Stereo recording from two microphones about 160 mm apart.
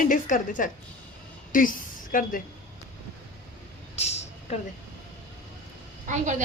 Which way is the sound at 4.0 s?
45° left (ahead or behind).